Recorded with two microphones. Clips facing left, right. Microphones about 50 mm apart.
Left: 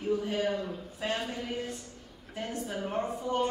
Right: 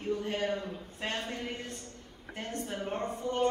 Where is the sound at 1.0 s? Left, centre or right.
Right.